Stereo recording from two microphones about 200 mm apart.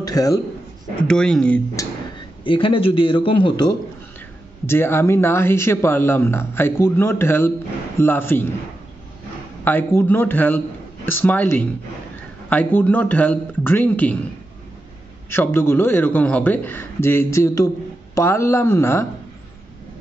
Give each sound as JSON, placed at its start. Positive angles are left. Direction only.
{"t": 0.0, "sound": "speech", "side_deg": 15}
{"t": 1.0, "sound": "speech", "side_deg": 5}
{"t": 2.4, "sound": "a man's voice", "side_deg": 25}
{"t": 4.6, "sound": "speech", "side_deg": 10}
{"t": 9.7, "sound": "speech", "side_deg": 10}
{"t": 15.2, "sound": "speech", "side_deg": 10}